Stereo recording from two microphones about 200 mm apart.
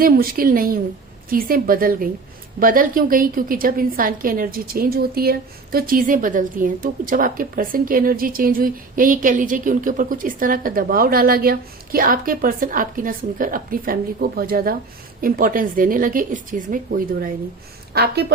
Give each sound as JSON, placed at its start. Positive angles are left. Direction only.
{"t": 0.0, "sound": "a woman's voice", "side_deg": -45}